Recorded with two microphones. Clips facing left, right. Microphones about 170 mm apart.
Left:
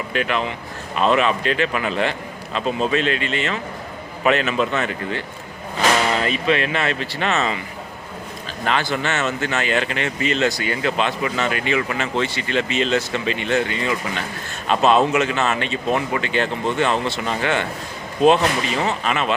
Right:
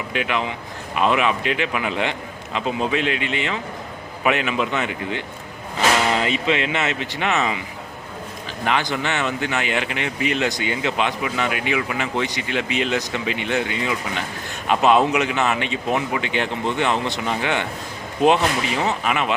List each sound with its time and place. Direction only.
0.1 s speech: 15° right (ahead or behind)